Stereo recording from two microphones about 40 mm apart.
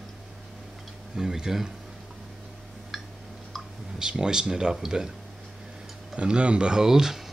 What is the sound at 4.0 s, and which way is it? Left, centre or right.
Speech, centre.